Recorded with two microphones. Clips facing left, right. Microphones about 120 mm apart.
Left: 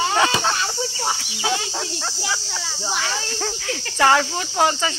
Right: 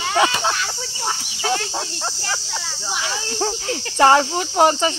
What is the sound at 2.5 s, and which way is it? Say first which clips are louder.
Speech: left 1 dB; 5° right (ahead or behind).